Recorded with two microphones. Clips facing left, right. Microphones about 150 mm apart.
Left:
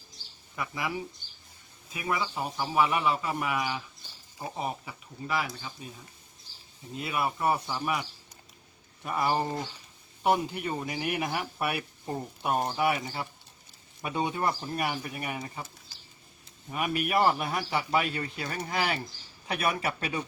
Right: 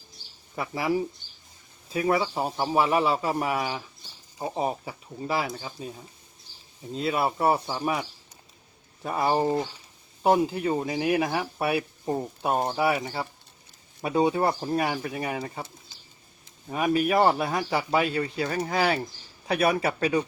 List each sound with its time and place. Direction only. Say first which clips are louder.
0.5 s speech: right 7 dB; 35° right (ahead or behind)
6.9 s speech: right 5 dB; 30° right (ahead or behind)
9.0 s speech: right 4 dB; 30° right (ahead or behind)
14.8 s speech: right 5 dB; 25° right (ahead or behind)